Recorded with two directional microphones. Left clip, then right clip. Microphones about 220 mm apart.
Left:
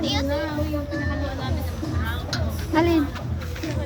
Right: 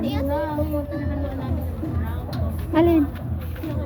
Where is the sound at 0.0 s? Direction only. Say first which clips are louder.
Left 2 dB; 45° right (ahead or behind).